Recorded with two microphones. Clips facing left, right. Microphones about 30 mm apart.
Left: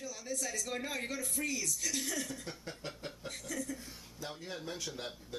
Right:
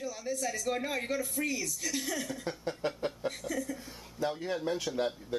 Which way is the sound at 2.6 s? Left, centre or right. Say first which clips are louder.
Right 10 dB; right.